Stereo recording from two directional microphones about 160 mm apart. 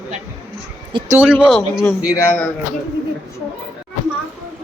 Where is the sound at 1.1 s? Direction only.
10° right (ahead or behind).